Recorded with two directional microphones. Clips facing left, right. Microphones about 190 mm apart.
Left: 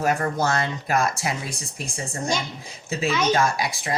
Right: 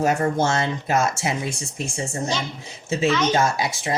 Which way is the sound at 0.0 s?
25° right (ahead or behind).